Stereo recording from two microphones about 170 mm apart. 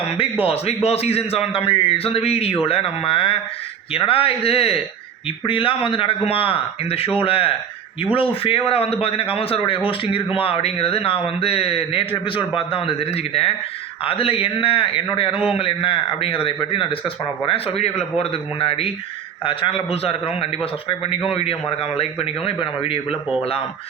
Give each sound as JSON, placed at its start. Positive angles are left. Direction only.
{"t": 0.2, "sound": "a man's voice", "side_deg": 35}